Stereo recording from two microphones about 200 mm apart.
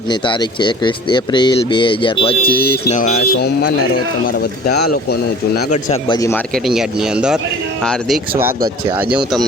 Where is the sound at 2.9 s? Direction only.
40° left (ahead or behind).